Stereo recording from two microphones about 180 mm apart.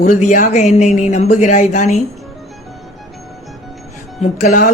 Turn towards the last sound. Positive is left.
turn(degrees=50)  # may be behind; listen again after turning